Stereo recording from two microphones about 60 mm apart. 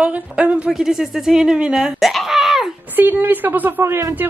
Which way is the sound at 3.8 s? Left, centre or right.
Right.